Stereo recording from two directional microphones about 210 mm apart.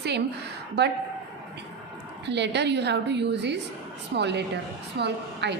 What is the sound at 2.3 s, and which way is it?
A woman's voice, 55° right (ahead or behind).